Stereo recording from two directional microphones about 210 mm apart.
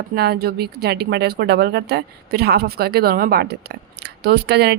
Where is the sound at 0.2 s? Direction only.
50° right (ahead or behind).